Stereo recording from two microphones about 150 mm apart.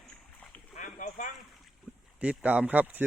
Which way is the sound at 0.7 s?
55° left (ahead or behind).